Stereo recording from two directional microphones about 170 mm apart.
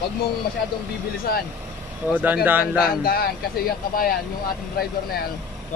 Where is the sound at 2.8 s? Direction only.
60° left (ahead or behind).